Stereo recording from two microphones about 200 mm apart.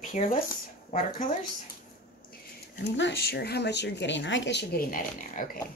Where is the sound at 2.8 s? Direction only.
65° left (ahead or behind); by 5.6 s 45° left (ahead or behind).